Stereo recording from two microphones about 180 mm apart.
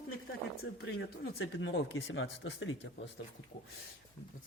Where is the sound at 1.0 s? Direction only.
80° left.